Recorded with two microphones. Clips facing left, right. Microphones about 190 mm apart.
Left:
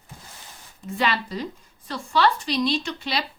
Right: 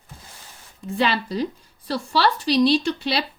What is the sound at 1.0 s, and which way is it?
A woman's voice, 30° right (ahead or behind).